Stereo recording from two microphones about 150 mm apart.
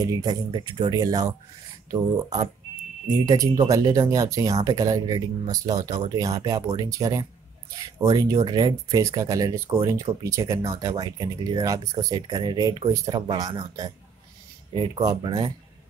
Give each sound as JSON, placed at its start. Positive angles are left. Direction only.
{"t": 0.0, "sound": "speech", "side_deg": -25}